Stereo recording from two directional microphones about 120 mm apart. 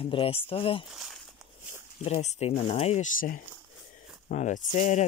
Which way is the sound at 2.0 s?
70° left (ahead or behind).